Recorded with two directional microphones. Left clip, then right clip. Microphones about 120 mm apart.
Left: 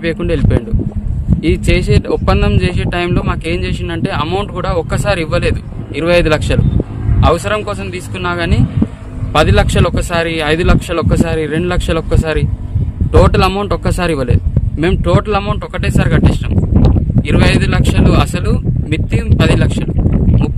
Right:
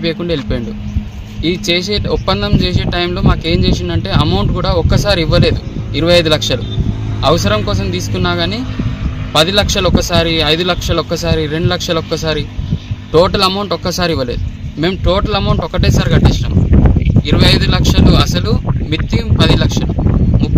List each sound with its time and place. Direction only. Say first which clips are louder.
0.0 s speech: left 1 dB; 50° left (ahead or behind)